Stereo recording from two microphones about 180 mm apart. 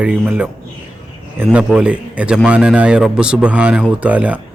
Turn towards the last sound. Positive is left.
turn(degrees=-10)  # may be behind; listen again after turning